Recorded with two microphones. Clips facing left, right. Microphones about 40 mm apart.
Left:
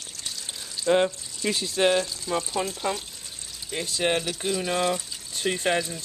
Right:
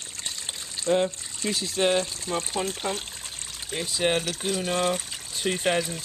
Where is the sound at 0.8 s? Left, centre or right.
Left.